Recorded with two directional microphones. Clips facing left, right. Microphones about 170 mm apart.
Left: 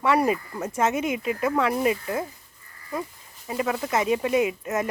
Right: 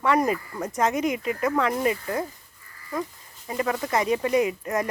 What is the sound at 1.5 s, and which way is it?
Speech, 10° left (ahead or behind).